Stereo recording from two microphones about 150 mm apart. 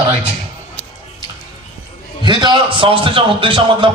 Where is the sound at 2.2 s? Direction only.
30° right (ahead or behind).